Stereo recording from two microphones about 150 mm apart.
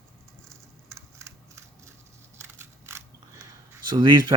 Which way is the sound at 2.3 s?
15° right (ahead or behind).